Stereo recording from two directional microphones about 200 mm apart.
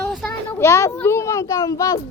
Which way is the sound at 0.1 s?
10° left (ahead or behind).